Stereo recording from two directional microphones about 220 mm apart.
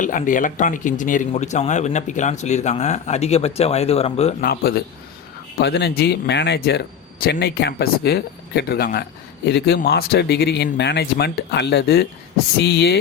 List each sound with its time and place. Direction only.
0.0 s speech: 35° left (ahead or behind)
4.4 s speech: 45° left (ahead or behind)